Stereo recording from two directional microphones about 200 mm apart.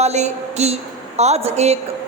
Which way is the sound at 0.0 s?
35° right (ahead or behind).